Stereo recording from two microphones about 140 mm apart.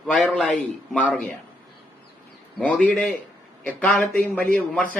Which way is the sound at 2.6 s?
10° left (ahead or behind).